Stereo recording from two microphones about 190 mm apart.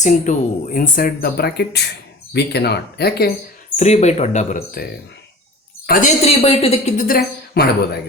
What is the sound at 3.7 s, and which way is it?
Speech, 35° left (ahead or behind).